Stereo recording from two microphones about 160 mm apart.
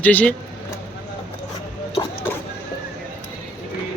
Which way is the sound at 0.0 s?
10° left (ahead or behind).